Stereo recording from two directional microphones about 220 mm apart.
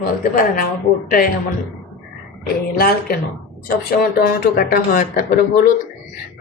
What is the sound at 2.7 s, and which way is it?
Speech, 40° left (ahead or behind).